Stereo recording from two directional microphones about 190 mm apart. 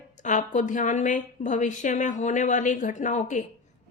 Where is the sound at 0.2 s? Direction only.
40° left (ahead or behind).